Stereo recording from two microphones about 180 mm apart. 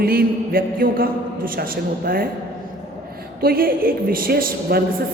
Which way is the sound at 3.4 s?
55° right (ahead or behind).